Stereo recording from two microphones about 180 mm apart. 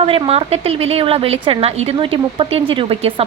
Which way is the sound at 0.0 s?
35° right (ahead or behind).